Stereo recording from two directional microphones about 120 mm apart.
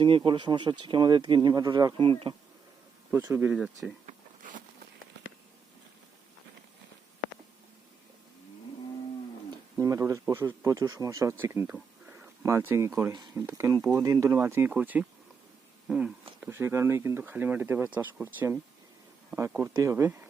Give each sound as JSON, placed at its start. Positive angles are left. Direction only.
{"t": 0.3, "sound": "speech", "side_deg": -40}
{"t": 3.3, "sound": "speech", "side_deg": -15}
{"t": 4.0, "sound": "zipper", "side_deg": -90}
{"t": 9.7, "sound": "speech", "side_deg": -25}
{"t": 11.7, "sound": "a sound", "side_deg": -10}
{"t": 12.4, "sound": "speech", "side_deg": -20}
{"t": 14.3, "sound": "speech", "side_deg": -15}
{"t": 16.4, "sound": "speech", "side_deg": -20}